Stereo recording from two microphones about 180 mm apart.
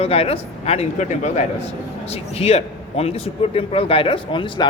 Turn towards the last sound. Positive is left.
turn(degrees=30)  # may be behind; listen again after turning